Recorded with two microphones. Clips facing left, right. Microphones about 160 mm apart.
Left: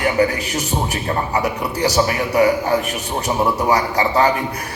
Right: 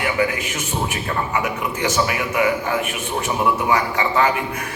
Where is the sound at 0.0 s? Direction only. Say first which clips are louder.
Left 4 dB; 40° left (ahead or behind).